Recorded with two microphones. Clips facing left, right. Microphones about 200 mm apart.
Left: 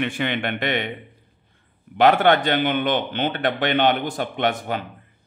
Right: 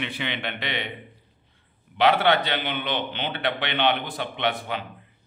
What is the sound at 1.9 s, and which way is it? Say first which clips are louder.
A man's voice: left 4 dB; 50° left (ahead or behind).